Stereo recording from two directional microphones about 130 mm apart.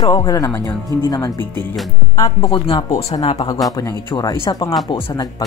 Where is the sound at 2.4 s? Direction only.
40° left (ahead or behind).